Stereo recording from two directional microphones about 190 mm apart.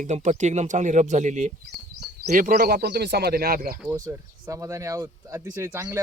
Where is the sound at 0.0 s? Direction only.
40° right (ahead or behind).